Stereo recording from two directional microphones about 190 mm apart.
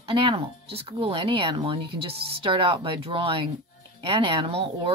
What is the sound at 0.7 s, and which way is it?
Speech, 30° right (ahead or behind).